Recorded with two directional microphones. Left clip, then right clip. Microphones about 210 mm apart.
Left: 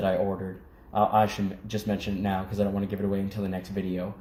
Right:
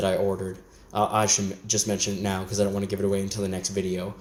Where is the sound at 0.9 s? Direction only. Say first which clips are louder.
Even; 45° right (ahead or behind).